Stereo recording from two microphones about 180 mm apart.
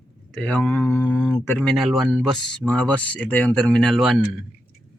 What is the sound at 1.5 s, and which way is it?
A man's voice, centre (ahead or behind).